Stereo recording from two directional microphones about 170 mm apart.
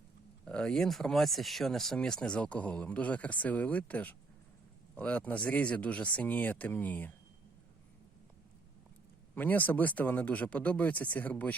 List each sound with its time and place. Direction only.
0.4 s speech: 5° left (ahead or behind)
9.3 s speech: 10° left (ahead or behind)